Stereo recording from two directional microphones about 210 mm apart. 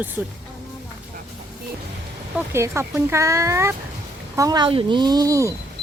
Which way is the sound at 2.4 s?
15° right (ahead or behind).